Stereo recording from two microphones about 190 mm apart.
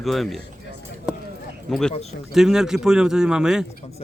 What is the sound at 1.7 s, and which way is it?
Speech, centre (ahead or behind).